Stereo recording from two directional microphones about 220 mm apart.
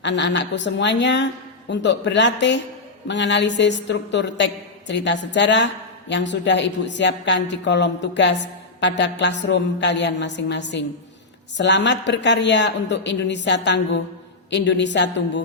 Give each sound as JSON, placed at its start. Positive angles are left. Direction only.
{"t": 0.0, "sound": "a woman's voice", "side_deg": 55}